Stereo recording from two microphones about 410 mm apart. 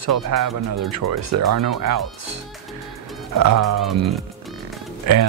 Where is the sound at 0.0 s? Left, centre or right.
Right.